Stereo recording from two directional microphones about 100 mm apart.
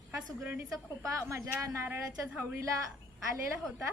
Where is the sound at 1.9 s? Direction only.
20° right (ahead or behind).